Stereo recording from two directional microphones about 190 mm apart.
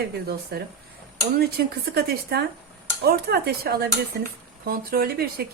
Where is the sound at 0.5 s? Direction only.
55° right (ahead or behind).